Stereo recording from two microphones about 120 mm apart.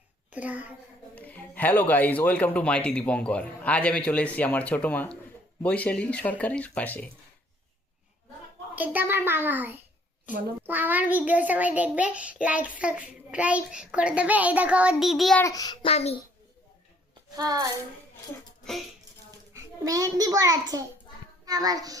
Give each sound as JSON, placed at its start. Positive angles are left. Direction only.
{"t": 0.3, "sound": "a woman's voice", "side_deg": -15}
{"t": 1.1, "sound": "speech", "side_deg": 15}
{"t": 8.7, "sound": "a child's voice", "side_deg": -15}
{"t": 15.4, "sound": "child singing", "side_deg": 30}
{"t": 15.9, "sound": "a child's voice", "side_deg": 60}
{"t": 17.3, "sound": "a child's voice", "side_deg": -30}
{"t": 19.5, "sound": "a child's voice", "side_deg": -30}